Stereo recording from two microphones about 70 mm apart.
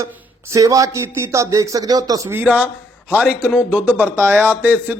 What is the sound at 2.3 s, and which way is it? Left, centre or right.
A man's voice, right.